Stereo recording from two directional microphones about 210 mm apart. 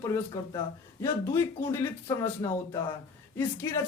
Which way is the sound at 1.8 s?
15° left (ahead or behind).